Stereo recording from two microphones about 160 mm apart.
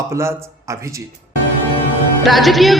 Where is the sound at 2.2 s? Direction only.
Centre (ahead or behind).